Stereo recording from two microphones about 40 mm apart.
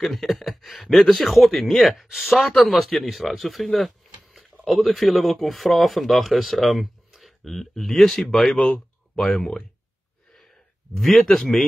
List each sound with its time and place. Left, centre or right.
0.0 s speech: centre
9.4 s speech: left
11.0 s speech: centre